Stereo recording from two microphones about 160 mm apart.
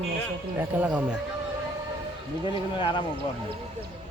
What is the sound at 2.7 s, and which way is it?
Speech, 30° left (ahead or behind).